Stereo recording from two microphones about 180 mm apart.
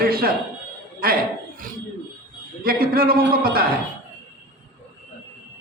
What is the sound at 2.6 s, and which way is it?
Speech, 55° right (ahead or behind).